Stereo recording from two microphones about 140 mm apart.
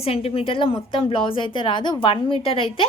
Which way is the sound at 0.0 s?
45° left (ahead or behind).